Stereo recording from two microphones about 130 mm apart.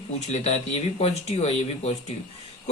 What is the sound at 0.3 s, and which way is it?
Speech, 60° left (ahead or behind).